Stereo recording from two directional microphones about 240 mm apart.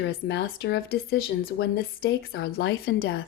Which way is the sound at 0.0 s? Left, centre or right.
Left.